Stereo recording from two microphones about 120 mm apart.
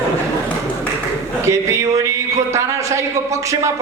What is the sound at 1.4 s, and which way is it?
A man's voice, 25° right (ahead or behind).